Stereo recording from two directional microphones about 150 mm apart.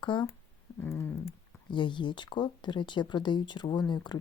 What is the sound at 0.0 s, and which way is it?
Speech, 30° left (ahead or behind).